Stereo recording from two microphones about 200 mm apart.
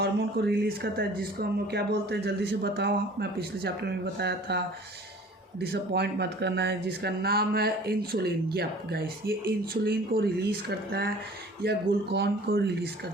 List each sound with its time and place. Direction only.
0.0 s speech: 55° right (ahead or behind)